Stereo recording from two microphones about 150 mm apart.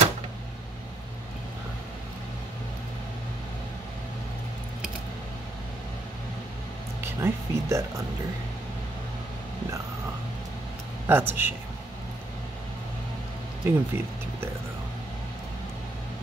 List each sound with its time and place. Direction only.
7.0 s speech: 15° right (ahead or behind)
11.1 s speech: 15° right (ahead or behind)
13.7 s speech: 15° right (ahead or behind)